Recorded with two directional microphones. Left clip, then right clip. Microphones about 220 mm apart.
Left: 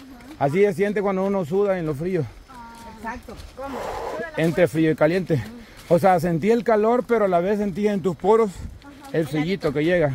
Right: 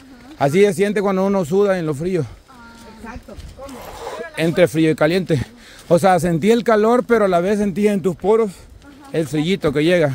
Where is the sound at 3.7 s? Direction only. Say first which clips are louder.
Left 7 dB; centre (ahead or behind).